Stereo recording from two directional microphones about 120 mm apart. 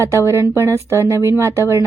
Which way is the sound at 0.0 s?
25° right (ahead or behind).